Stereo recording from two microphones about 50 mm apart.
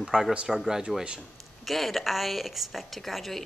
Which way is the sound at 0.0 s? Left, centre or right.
Centre.